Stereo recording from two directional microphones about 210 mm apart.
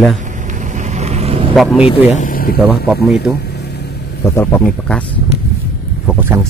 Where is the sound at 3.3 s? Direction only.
50° left (ahead or behind).